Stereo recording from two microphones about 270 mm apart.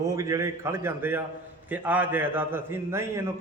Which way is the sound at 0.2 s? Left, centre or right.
Centre.